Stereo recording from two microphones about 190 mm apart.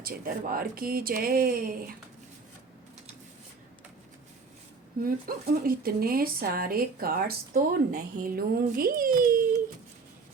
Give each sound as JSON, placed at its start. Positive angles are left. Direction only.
{"t": 0.0, "sound": "speech", "side_deg": -50}
{"t": 5.0, "sound": "speech", "side_deg": -50}